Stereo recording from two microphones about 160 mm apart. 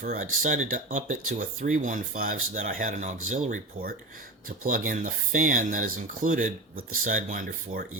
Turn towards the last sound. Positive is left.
turn(degrees=-60)  # may be behind; listen again after turning